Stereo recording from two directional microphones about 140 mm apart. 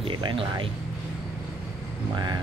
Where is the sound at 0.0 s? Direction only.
35° right (ahead or behind).